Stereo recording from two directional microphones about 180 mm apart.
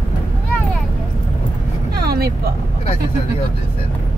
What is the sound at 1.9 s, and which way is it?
Vehicle, 60° right (ahead or behind).